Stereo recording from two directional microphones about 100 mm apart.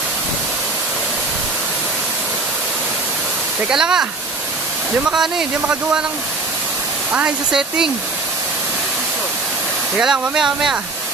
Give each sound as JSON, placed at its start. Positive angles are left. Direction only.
{"t": 3.6, "sound": "speech", "side_deg": -5}
{"t": 5.1, "sound": "speech", "side_deg": -5}
{"t": 7.1, "sound": "speech", "side_deg": -10}
{"t": 9.9, "sound": "speech", "side_deg": -5}